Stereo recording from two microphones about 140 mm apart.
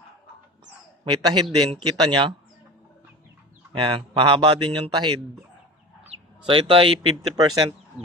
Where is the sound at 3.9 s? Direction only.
40° right (ahead or behind).